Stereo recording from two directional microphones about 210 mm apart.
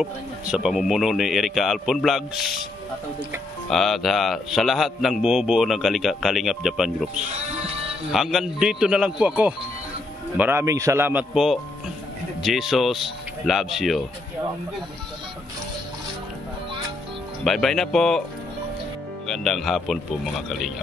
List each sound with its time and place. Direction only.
0.0 s a man's voice: 5° right (ahead or behind)
3.7 s a man's voice: centre (ahead or behind)
7.2 s speech: 30° right (ahead or behind)
8.1 s a man's voice: centre (ahead or behind)
17.5 s a man's voice: centre (ahead or behind)
19.2 s a man's voice: centre (ahead or behind)